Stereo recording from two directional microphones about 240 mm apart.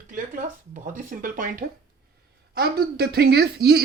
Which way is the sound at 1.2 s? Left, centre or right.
Right.